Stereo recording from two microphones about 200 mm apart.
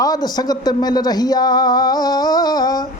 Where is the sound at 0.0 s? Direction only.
20° left (ahead or behind).